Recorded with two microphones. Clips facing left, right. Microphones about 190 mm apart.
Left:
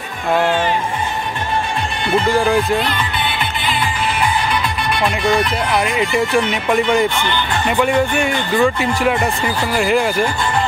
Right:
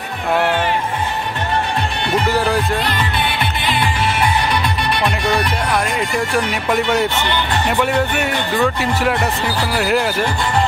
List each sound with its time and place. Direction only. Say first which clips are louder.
2.2 s speech: left 3 dB; 5° right (ahead or behind)
5.9 s speech: left 3 dB; 5° left (ahead or behind)
8.2 s speech: left 2 dB; centre (ahead or behind)